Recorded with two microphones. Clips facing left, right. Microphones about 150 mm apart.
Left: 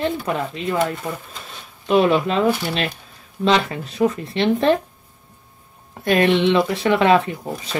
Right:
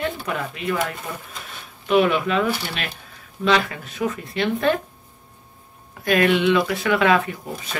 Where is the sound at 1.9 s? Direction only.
30° left (ahead or behind).